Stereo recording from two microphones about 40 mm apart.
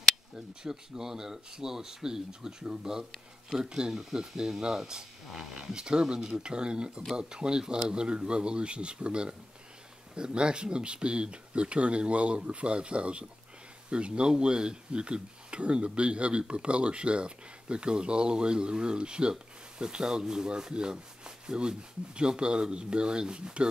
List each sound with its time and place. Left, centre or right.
0.7 s speech: centre